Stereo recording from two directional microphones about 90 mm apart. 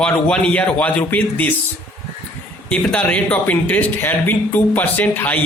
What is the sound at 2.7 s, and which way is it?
Speech, 15° left (ahead or behind).